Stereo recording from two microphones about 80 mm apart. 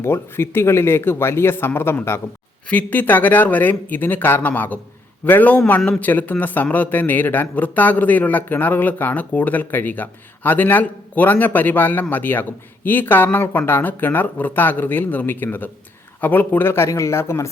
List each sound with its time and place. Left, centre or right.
0.0 s a man's voice: left